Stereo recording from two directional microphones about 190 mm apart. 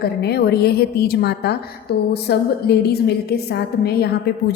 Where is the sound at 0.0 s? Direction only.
55° left (ahead or behind).